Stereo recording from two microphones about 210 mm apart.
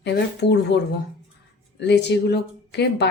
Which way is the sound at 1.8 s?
55° left (ahead or behind).